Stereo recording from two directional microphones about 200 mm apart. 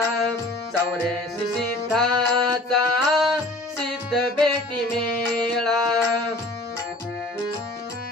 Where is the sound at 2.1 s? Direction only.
20° right (ahead or behind).